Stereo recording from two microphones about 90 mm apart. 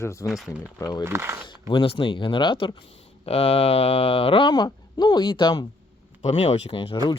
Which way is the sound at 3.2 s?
90° left.